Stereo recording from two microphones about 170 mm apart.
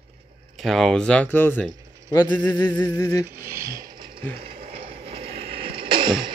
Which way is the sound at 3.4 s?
15° right (ahead or behind).